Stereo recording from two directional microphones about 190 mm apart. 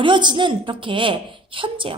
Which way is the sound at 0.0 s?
25° right (ahead or behind).